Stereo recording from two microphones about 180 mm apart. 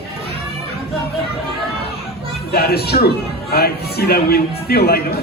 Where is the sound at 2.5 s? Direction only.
60° left (ahead or behind).